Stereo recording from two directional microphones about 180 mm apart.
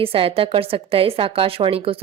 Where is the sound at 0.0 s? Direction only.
30° right (ahead or behind).